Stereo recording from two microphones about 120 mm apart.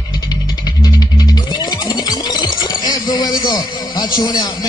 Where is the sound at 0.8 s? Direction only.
35° left (ahead or behind).